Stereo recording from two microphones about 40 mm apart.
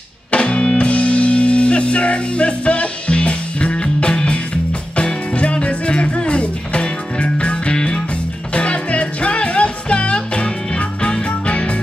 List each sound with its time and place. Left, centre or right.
0.3 s music: left